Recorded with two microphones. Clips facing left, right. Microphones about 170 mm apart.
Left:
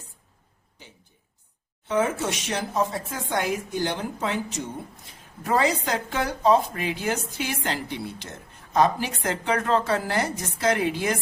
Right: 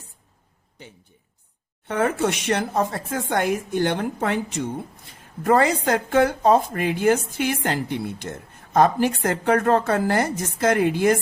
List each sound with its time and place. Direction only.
1.9 s a woman's voice: 60° right (ahead or behind)